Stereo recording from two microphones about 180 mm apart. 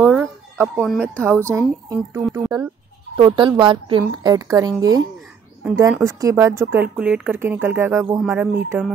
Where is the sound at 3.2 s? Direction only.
25° right (ahead or behind).